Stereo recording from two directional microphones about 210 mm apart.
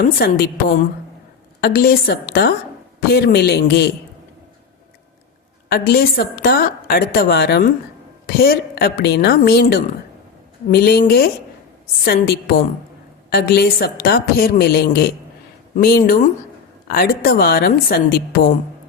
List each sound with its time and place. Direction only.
0.0 s a woman's voice: 45° left (ahead or behind)
5.6 s a woman's voice: 45° left (ahead or behind)